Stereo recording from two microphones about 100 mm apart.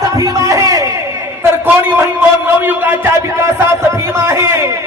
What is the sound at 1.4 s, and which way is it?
A man's voice, 20° right (ahead or behind).